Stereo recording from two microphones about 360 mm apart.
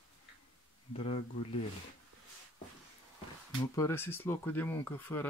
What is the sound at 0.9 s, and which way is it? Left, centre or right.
Speech, centre.